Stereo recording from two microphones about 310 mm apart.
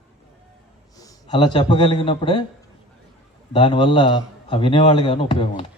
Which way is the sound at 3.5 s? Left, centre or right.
Centre.